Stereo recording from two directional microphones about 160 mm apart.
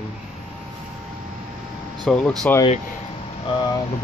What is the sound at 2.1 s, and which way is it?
Speech, 5° left (ahead or behind).